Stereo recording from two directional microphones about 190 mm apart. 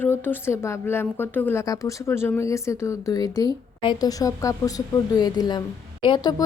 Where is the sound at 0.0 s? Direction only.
10° left (ahead or behind).